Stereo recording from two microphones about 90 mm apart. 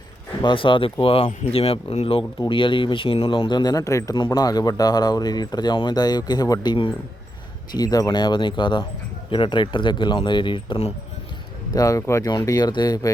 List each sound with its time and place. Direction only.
0.4 s speech: 70° left (ahead or behind); by 2.2 s 90° left
2.4 s speech: 65° left (ahead or behind)
3.6 s speech: 45° left (ahead or behind); by 10.9 s 65° left (ahead or behind)
11.7 s speech: 40° left (ahead or behind)
12.5 s speech: 50° left (ahead or behind)